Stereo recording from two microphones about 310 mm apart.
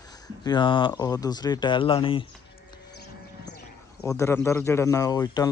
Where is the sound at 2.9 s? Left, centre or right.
Left.